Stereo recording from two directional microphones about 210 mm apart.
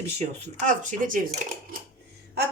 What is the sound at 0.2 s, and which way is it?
Speech, 35° right (ahead or behind).